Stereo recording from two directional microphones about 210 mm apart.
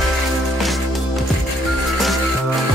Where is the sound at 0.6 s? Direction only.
Centre (ahead or behind).